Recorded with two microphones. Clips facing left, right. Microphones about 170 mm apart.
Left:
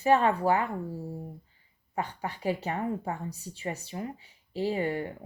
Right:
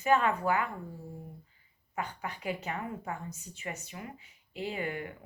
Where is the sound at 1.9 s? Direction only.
35° left (ahead or behind).